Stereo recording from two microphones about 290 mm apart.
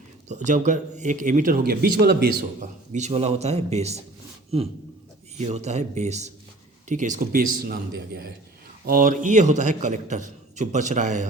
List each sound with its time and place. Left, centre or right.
0.3 s speech: right
5.4 s speech: right